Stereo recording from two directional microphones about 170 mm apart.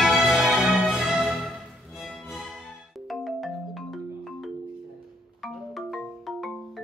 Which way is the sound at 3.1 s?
Centre (ahead or behind).